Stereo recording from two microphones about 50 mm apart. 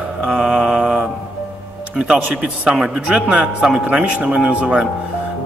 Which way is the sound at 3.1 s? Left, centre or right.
Right.